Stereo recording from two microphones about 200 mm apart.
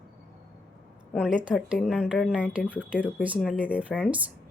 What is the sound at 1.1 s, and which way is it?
A woman's voice, 5° left (ahead or behind).